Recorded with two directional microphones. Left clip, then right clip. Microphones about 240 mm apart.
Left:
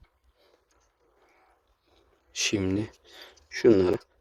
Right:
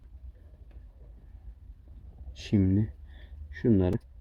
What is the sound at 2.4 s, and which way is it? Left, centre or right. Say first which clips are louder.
Speech: left 1 dB; left.